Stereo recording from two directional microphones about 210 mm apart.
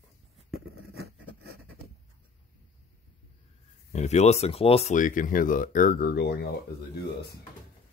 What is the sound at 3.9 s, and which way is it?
Speech, 30° left (ahead or behind).